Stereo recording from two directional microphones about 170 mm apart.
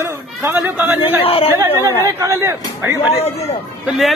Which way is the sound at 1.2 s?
35° left (ahead or behind).